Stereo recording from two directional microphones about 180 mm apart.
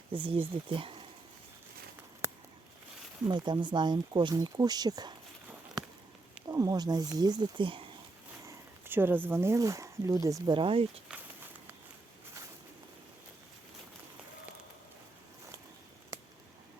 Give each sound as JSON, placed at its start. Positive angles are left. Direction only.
{"t": 0.1, "sound": "speech", "side_deg": -30}
{"t": 2.2, "sound": "a sound", "side_deg": -15}
{"t": 3.2, "sound": "speech", "side_deg": -25}
{"t": 6.5, "sound": "speech", "side_deg": -20}
{"t": 8.4, "sound": "speech", "side_deg": -10}